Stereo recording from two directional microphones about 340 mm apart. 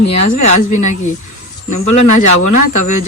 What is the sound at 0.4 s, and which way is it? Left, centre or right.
Speech, centre.